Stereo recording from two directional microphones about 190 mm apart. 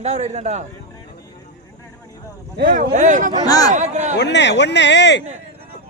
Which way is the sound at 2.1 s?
20° left (ahead or behind).